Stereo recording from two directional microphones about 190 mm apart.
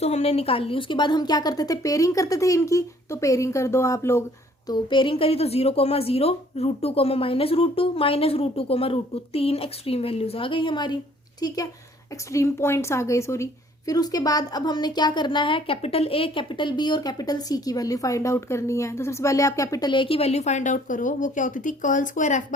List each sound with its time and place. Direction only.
0.0 s a woman's voice: 35° left (ahead or behind); by 4.2 s 15° left (ahead or behind)
4.7 s a woman's voice: 25° left (ahead or behind); by 22.4 s 40° left (ahead or behind)